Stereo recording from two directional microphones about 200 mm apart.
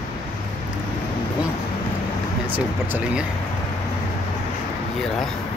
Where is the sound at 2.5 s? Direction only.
10° right (ahead or behind).